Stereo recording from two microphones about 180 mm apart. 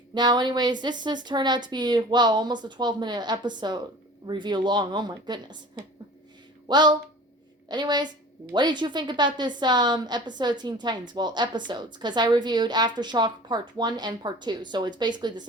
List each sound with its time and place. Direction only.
0.1 s a woman's voice: 25° right (ahead or behind)